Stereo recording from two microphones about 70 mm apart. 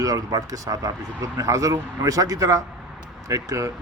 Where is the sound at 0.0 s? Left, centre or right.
Right.